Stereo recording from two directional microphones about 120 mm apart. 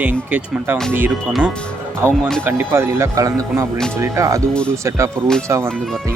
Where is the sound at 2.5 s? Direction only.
20° right (ahead or behind).